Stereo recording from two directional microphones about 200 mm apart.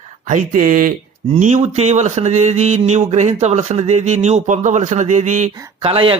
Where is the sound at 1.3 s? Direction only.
35° right (ahead or behind).